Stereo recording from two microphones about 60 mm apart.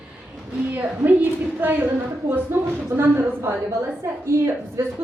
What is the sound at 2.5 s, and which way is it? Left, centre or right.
Speech, right.